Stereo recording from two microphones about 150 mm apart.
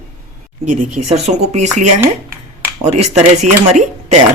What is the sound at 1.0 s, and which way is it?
Speech, 45° right (ahead or behind).